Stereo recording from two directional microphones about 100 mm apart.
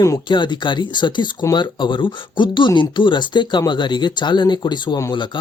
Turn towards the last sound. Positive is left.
turn(degrees=45)  # may be behind; listen again after turning